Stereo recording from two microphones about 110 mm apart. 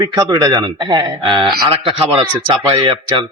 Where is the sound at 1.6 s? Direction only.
50° right (ahead or behind).